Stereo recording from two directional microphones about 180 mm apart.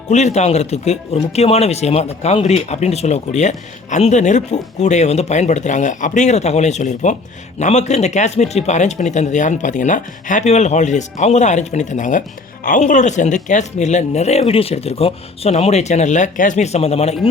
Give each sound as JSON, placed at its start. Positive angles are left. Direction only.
{"t": 0.1, "sound": "speech", "side_deg": 40}